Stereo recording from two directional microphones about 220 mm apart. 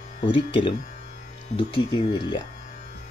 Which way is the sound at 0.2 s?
25° left (ahead or behind).